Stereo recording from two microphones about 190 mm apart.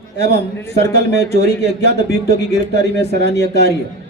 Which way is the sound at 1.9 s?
60° left (ahead or behind).